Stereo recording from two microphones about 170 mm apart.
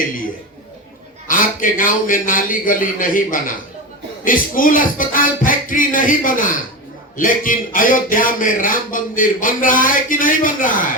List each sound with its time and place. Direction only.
1.3 s speech: 50° left (ahead or behind)